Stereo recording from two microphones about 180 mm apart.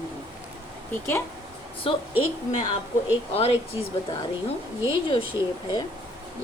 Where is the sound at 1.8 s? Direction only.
30° left (ahead or behind).